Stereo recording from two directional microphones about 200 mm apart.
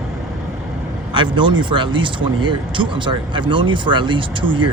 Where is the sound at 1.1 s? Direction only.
25° right (ahead or behind).